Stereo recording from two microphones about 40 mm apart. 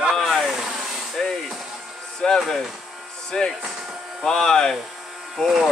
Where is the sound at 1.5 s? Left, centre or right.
Centre.